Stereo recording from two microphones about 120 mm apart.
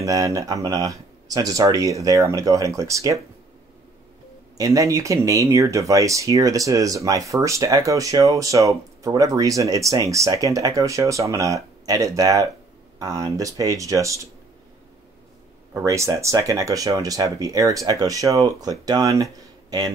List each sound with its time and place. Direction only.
0.0 s speech: 30° right (ahead or behind)
4.6 s speech: 30° right (ahead or behind)
15.7 s speech: 25° right (ahead or behind)